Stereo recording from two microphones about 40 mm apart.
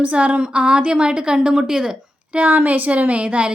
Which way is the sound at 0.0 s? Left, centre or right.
Right.